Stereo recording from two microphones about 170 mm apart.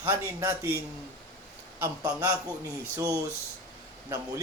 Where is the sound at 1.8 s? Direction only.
15° right (ahead or behind).